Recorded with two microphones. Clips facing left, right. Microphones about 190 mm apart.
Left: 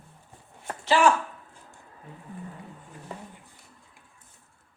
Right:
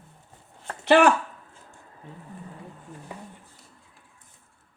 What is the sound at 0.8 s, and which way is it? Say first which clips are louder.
Speech: right 4 dB; 65° right (ahead or behind).